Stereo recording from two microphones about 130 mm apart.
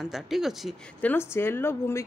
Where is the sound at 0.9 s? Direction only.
15° left (ahead or behind).